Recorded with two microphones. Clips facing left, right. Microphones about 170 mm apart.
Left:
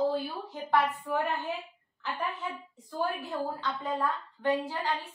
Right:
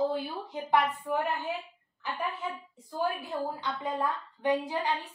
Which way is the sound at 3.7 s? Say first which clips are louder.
Even; 15° right (ahead or behind).